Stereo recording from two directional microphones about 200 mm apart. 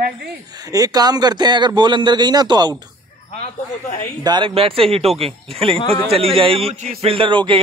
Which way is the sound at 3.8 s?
40° left (ahead or behind).